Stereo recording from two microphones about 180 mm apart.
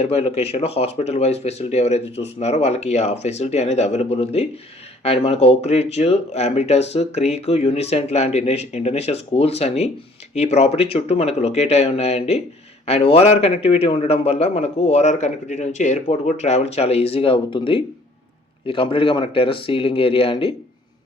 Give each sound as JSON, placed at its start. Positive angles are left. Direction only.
{"t": 0.0, "sound": "a man's voice", "side_deg": 35}